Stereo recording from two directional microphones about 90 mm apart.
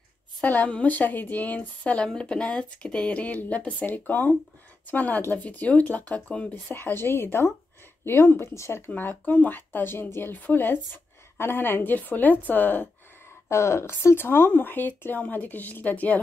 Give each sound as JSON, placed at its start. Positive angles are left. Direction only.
{"t": 0.4, "sound": "a woman's voice", "side_deg": 15}
{"t": 13.5, "sound": "speech", "side_deg": 30}